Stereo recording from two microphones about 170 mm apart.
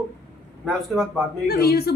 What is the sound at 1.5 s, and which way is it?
Speech, 65° left (ahead or behind).